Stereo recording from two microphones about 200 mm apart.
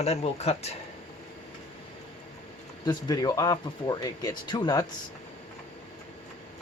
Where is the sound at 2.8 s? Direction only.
20° left (ahead or behind).